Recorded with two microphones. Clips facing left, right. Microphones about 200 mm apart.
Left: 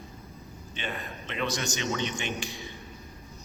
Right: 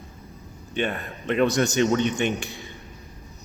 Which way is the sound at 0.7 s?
55° right (ahead or behind).